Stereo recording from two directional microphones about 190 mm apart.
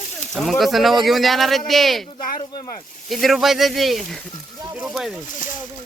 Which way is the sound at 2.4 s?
25° left (ahead or behind).